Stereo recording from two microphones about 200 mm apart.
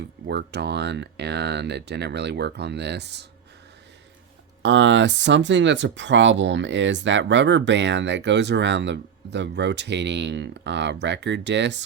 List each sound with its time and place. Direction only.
0.3 s speech: 55° right (ahead or behind)
4.6 s speech: 65° right (ahead or behind)